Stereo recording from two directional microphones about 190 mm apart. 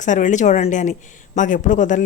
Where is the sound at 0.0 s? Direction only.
40° left (ahead or behind).